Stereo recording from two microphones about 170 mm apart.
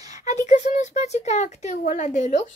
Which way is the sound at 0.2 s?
45° left (ahead or behind).